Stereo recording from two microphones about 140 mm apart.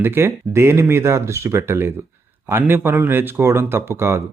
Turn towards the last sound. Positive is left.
turn(degrees=-20)  # may be behind; listen again after turning